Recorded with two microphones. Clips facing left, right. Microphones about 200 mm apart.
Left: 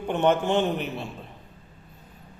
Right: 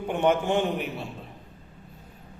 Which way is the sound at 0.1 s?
10° right (ahead or behind).